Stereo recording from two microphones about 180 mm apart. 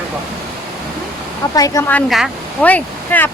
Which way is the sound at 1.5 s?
20° left (ahead or behind).